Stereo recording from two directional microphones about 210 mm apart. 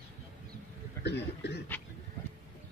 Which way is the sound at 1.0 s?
55° left (ahead or behind).